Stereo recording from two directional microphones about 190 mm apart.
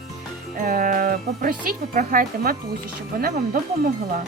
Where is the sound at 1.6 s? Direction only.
50° right (ahead or behind).